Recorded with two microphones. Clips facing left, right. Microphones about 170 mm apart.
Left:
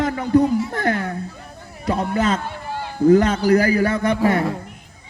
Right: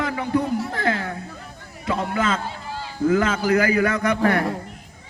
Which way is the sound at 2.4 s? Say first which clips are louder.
Left 3 dB; 55° left (ahead or behind).